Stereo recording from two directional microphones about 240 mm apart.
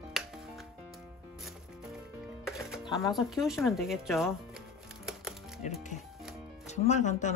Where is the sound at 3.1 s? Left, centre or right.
Centre.